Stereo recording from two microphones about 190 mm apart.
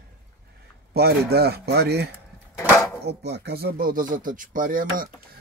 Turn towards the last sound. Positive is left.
turn(degrees=-45)  # may be behind; listen again after turning